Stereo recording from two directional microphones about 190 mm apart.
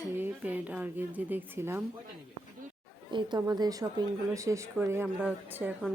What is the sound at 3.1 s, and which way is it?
A woman's voice, 20° right (ahead or behind).